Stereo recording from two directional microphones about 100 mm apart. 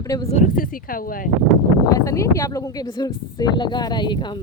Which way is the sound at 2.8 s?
50° left (ahead or behind).